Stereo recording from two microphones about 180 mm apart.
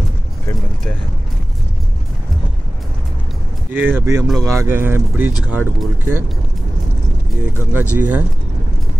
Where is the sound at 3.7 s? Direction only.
10° right (ahead or behind).